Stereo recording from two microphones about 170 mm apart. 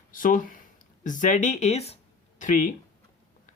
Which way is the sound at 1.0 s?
50° left (ahead or behind).